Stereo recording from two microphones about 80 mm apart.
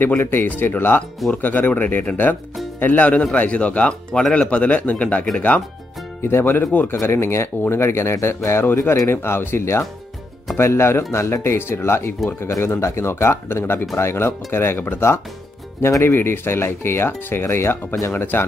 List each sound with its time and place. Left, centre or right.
0.2 s speech: left
6.2 s speech: left